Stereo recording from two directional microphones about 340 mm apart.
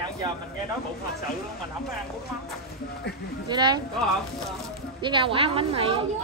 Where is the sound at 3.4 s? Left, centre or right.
Centre.